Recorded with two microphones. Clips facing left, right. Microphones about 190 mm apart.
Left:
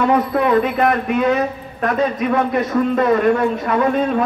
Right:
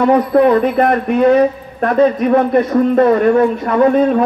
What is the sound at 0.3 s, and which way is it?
Speech, 50° right (ahead or behind).